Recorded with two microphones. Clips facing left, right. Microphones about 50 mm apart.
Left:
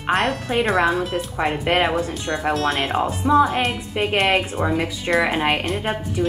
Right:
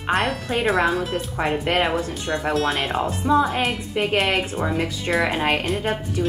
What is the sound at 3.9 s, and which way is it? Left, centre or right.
A woman's voice, centre.